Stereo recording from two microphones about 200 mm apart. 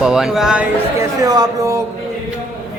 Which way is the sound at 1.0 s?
15° right (ahead or behind).